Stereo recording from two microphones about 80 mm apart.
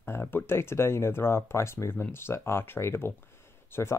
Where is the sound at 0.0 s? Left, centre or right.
Left.